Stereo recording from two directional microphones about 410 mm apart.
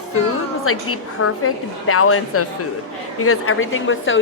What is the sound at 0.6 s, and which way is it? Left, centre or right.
A woman's voice, left.